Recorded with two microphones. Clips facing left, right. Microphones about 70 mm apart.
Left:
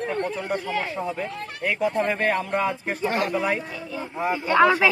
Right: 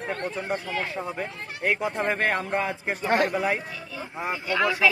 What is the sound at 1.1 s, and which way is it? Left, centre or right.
A man's voice, right.